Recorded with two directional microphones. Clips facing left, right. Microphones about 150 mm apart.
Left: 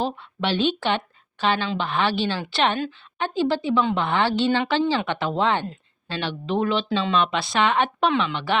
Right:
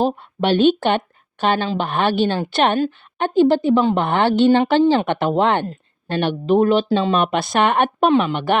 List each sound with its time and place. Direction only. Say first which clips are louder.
0.0 s a woman's voice: right 7 dB; 50° right (ahead or behind)